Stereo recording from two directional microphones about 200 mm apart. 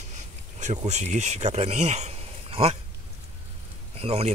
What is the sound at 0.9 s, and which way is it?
A man's voice, 35° right (ahead or behind).